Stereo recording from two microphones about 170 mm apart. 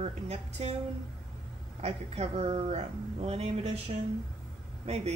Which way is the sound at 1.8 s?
35° right (ahead or behind).